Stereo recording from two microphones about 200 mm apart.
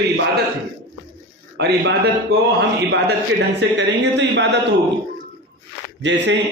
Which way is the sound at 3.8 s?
60° right (ahead or behind).